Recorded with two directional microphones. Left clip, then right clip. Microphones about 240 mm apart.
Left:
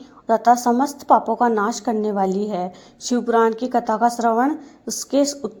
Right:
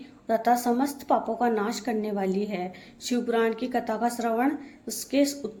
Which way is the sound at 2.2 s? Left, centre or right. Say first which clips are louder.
Left 7 dB; left.